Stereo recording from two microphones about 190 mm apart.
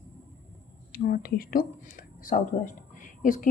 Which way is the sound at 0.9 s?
50° left (ahead or behind).